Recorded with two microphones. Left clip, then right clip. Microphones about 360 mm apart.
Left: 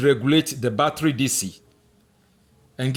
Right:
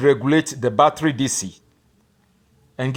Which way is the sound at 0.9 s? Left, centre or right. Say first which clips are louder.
Right 1 dB; right.